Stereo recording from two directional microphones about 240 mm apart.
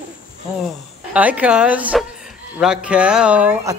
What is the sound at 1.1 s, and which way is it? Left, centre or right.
Speech, centre.